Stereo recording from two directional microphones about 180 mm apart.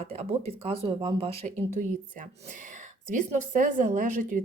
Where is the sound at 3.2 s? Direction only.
45° right (ahead or behind).